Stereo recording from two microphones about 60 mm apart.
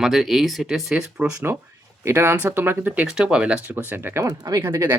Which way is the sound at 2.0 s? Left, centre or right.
Right.